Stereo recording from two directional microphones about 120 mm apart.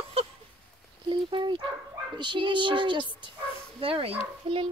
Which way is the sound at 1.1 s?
40° right (ahead or behind).